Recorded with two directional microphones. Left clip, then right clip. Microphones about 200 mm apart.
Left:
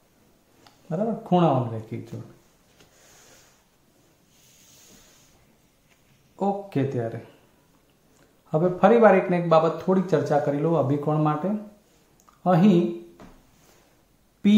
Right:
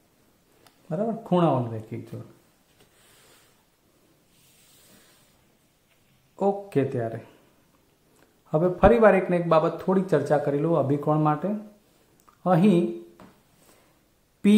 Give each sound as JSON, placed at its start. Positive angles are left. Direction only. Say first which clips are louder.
{"t": 0.8, "sound": "speech", "louder": "left 1 dB", "side_deg": -25}
{"t": 6.3, "sound": "speech", "louder": "right 2 dB", "side_deg": -25}
{"t": 8.5, "sound": "speech", "louder": "even", "side_deg": -25}
{"t": 12.4, "sound": "speech", "louder": "left 1 dB", "side_deg": -25}